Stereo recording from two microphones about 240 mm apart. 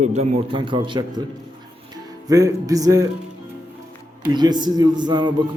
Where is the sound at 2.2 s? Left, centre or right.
Centre.